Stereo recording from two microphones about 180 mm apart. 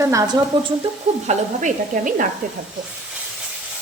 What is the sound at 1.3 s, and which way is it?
Speech, 45° right (ahead or behind).